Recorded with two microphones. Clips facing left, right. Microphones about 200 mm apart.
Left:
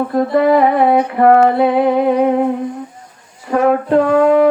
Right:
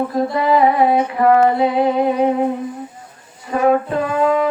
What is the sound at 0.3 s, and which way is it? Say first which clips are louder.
Brass instrument: left 3 dB; 55° left (ahead or behind).